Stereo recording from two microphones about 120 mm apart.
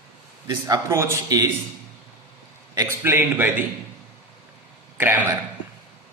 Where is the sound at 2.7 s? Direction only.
20° right (ahead or behind).